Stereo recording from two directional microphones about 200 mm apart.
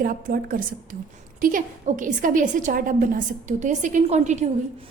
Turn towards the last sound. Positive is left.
turn(degrees=-35)  # may be behind; listen again after turning